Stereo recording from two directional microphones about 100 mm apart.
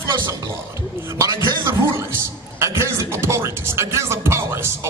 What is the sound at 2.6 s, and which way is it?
Speech, 30° right (ahead or behind).